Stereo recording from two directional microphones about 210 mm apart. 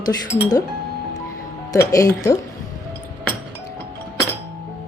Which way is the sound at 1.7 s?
15° left (ahead or behind).